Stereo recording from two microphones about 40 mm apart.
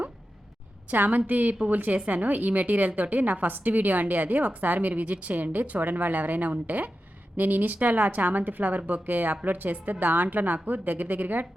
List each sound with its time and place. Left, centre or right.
0.9 s a woman's voice: right